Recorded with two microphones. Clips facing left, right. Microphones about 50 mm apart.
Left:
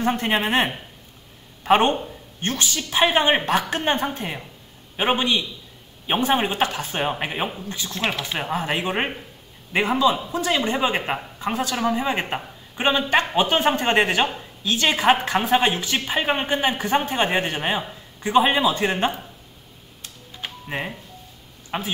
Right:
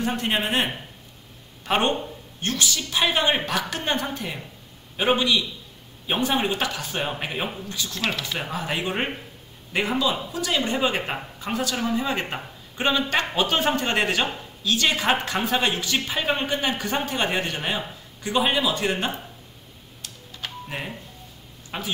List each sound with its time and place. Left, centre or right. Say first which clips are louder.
0.0 s a woman's voice: left 3 dB; left
20.0 s a sound: left 1 dB; left
21.6 s speech: left 3 dB; left